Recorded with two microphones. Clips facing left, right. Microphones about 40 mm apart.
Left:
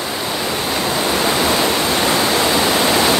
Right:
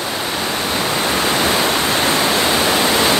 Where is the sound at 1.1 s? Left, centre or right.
Left.